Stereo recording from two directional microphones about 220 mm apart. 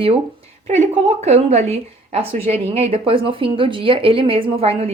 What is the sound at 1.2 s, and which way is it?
A woman's voice, 30° right (ahead or behind).